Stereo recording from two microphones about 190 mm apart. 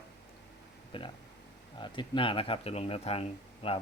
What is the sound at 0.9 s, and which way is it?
Speech, 25° left (ahead or behind).